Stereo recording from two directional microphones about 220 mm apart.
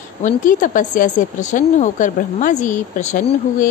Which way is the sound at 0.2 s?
35° left (ahead or behind).